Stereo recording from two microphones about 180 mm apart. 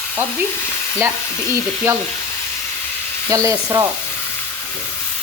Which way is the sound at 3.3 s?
20° right (ahead or behind).